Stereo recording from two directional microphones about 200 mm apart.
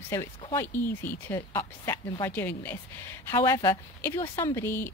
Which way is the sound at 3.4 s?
20° left (ahead or behind).